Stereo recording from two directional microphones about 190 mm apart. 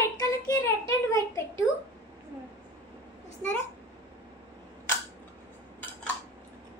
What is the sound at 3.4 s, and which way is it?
Speech, 10° left (ahead or behind).